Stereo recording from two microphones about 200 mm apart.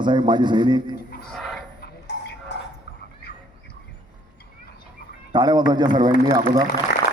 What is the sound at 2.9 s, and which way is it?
Dog, 55° left (ahead or behind).